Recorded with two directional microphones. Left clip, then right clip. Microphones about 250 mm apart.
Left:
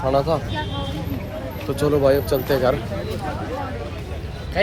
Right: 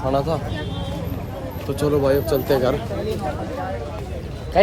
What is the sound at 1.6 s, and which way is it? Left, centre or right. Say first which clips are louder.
Speech: left 2 dB; centre.